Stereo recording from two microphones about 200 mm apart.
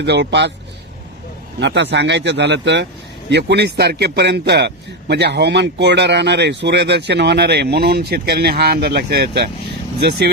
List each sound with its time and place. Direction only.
0.0 s a man's voice: 60° right (ahead or behind)
1.5 s a man's voice: 60° right (ahead or behind)